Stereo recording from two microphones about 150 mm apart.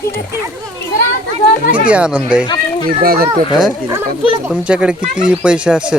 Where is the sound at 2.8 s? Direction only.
75° right (ahead or behind).